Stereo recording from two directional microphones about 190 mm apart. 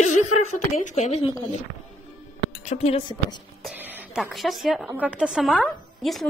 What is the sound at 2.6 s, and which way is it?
Speech, 35° left (ahead or behind).